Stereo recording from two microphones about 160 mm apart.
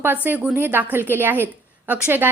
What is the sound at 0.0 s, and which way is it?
A woman's voice, 10° right (ahead or behind).